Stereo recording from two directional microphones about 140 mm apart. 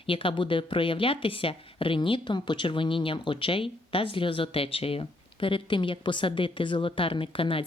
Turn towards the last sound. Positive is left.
turn(degrees=40)  # may be behind; listen again after turning